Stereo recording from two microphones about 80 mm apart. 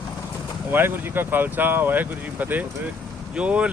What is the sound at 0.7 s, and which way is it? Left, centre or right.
Speech, right.